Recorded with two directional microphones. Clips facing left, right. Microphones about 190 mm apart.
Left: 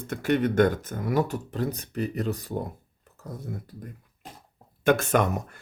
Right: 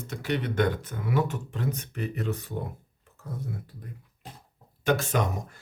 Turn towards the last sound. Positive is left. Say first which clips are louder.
# left 4 dB
turn(degrees=60)  # may be behind; listen again after turning